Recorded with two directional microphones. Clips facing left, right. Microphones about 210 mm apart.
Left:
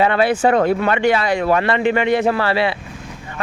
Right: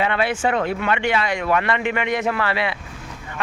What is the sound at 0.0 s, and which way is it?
Speech, 35° left (ahead or behind).